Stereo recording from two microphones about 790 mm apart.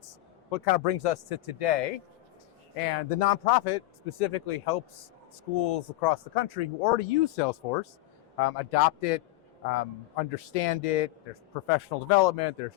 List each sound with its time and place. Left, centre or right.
0.5 s speech: left
2.7 s speech: left
10.3 s speech: left